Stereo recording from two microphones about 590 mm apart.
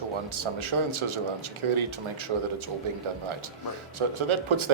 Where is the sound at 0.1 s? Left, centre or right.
Right.